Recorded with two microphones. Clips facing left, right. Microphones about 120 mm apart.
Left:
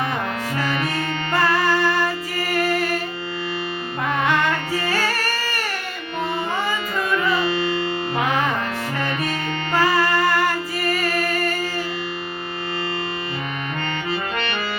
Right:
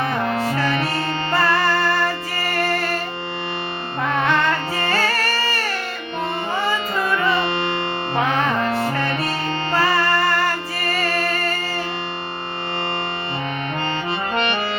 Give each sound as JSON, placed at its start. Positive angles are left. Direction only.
{"t": 1.4, "sound": "music", "side_deg": 15}
{"t": 4.0, "sound": "music", "side_deg": 10}
{"t": 8.2, "sound": "music", "side_deg": 10}
{"t": 8.8, "sound": "music", "side_deg": -35}
{"t": 9.7, "sound": "music", "side_deg": 15}